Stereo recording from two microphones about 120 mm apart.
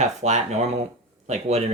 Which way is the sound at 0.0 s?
75° right (ahead or behind).